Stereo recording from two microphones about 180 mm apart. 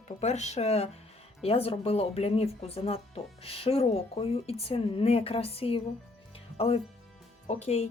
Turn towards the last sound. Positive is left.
turn(degrees=35)  # may be behind; listen again after turning